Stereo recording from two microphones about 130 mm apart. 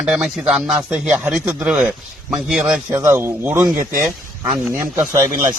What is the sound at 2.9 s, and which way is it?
Speech, 20° right (ahead or behind).